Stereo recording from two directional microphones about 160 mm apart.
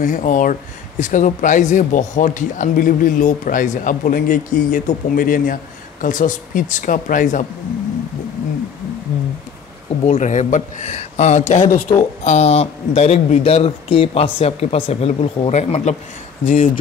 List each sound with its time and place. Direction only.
0.0 s speech: 55° left (ahead or behind)
10.0 s speech: 50° left (ahead or behind)